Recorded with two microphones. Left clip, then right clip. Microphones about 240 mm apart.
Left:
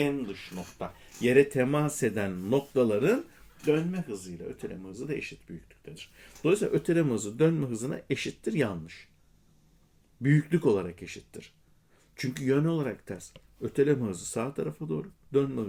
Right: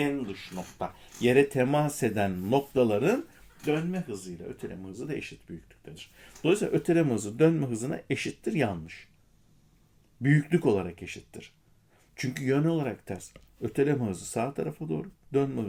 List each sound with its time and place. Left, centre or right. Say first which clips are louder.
0.0 s speech: even; centre
10.2 s speech: even; centre